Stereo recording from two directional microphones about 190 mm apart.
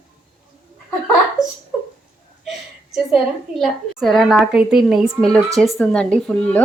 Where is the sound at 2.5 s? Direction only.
Centre (ahead or behind).